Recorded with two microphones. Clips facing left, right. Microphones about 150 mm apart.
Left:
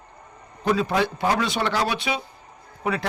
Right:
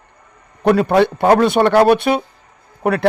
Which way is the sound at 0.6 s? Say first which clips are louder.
Right 9 dB; 60° right (ahead or behind).